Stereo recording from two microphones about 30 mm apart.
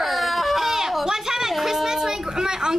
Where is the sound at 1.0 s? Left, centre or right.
Centre.